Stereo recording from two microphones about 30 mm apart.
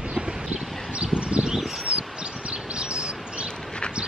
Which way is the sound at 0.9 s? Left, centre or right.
Right.